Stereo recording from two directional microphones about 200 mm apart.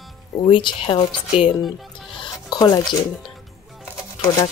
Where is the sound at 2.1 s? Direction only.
20° left (ahead or behind).